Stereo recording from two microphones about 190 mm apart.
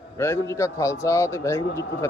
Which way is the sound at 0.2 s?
15° left (ahead or behind).